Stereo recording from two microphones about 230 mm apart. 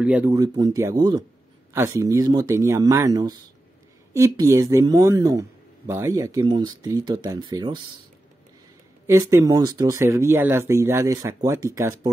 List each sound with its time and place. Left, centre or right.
0.0 s speech: centre
9.0 s speech: centre